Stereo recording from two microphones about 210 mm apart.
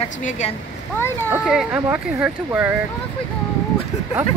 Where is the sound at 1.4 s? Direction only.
Centre (ahead or behind).